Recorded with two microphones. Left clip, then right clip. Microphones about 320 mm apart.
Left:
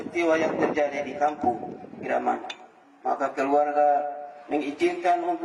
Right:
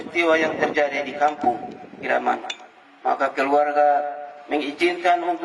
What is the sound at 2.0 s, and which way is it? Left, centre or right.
A man's voice, centre.